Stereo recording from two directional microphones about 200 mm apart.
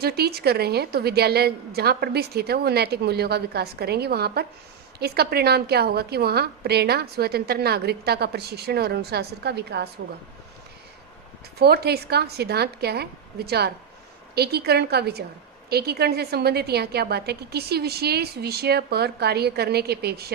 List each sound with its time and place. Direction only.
0.0 s a woman's voice: 50° right (ahead or behind)
11.6 s a woman's voice: 50° right (ahead or behind)